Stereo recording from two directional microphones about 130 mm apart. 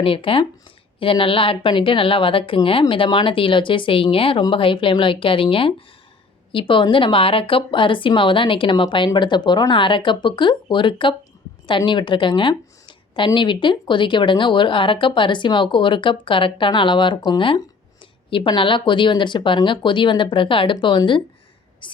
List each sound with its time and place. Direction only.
0.0 s speech: 45° left (ahead or behind)